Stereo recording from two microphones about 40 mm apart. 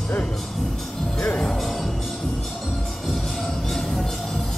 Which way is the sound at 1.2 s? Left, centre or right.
Left.